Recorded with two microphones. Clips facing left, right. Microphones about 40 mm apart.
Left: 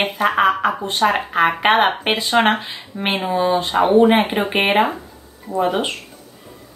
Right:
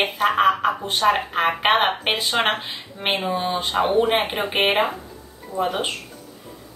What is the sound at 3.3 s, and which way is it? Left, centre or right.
Speech, centre.